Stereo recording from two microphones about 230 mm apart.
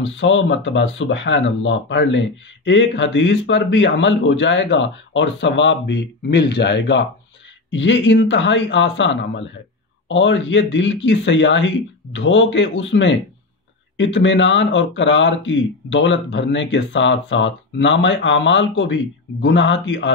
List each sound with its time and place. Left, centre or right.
0.0 s speech: left